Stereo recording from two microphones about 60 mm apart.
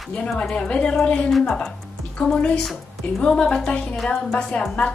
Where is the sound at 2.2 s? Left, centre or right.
Centre.